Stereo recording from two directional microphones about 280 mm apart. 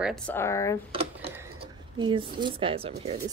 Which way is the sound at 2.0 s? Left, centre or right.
Centre.